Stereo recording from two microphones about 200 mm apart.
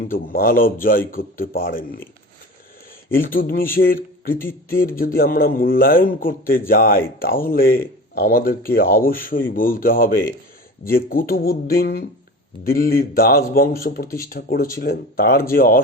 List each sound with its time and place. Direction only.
0.0 s speech: 45° left (ahead or behind)
3.1 s speech: 45° left (ahead or behind)